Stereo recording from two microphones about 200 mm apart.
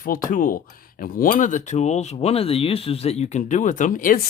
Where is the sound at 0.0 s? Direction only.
45° left (ahead or behind).